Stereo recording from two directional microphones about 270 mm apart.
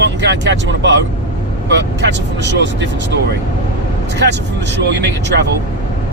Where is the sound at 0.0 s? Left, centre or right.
Right.